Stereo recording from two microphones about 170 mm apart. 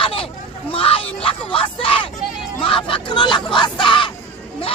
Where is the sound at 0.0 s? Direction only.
35° left (ahead or behind).